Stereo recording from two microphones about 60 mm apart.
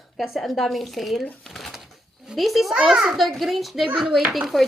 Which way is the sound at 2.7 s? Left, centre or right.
Centre.